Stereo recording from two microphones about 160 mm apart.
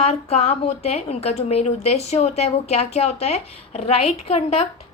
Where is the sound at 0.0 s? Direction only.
40° left (ahead or behind).